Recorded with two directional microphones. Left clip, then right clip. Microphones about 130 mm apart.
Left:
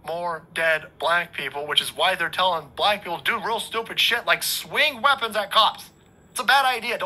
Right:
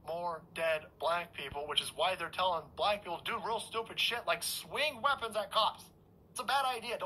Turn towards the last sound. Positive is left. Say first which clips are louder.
# left 13 dB
turn(degrees=25)  # may be behind; listen again after turning